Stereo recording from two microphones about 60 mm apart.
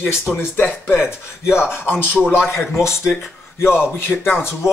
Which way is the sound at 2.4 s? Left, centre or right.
Left.